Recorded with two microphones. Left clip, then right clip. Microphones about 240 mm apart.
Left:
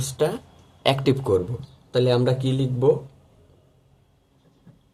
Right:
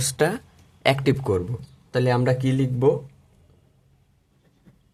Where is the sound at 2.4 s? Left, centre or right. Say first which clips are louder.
Right 1 dB; right.